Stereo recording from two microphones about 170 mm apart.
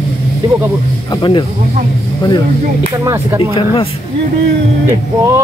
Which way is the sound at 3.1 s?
15° right (ahead or behind).